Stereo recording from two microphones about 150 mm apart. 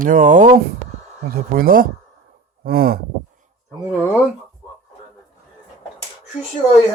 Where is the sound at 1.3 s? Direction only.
75° right (ahead or behind).